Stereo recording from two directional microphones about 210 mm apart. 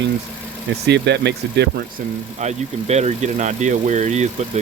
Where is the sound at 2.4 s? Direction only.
30° right (ahead or behind).